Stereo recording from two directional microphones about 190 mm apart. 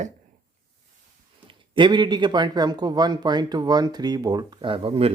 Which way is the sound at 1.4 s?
25° right (ahead or behind).